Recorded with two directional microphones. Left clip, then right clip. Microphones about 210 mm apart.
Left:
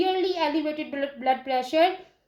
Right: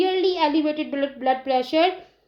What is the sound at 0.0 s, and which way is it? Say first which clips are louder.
A woman's voice: right 4 dB; 40° right (ahead or behind).